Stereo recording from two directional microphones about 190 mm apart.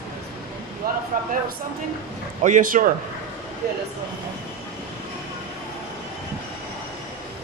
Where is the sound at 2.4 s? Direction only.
45° right (ahead or behind).